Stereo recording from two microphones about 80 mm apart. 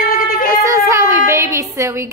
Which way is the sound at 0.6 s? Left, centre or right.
Right.